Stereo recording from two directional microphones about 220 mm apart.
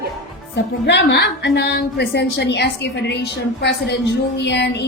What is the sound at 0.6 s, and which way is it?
A woman's voice, 50° left (ahead or behind).